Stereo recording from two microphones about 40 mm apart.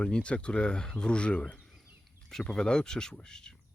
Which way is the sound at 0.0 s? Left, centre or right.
Left.